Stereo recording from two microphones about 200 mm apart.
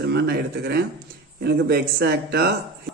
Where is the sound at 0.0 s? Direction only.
55° right (ahead or behind).